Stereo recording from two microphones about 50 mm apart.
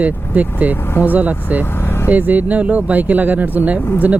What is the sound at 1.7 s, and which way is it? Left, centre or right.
Vehicle, left.